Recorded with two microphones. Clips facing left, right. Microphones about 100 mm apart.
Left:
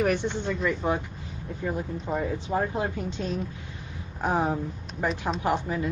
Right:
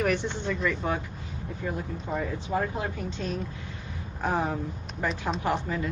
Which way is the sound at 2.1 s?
20° left (ahead or behind).